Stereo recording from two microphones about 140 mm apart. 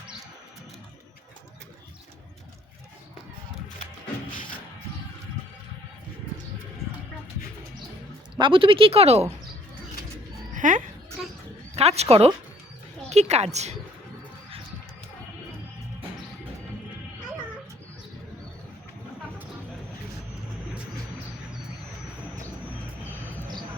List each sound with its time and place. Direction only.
8.4 s speech: 35° right (ahead or behind)
10.5 s a sound: 65° right (ahead or behind)
11.8 s a woman's voice: 50° right (ahead or behind)